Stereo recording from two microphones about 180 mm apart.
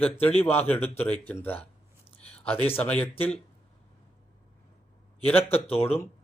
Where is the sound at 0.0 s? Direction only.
10° left (ahead or behind).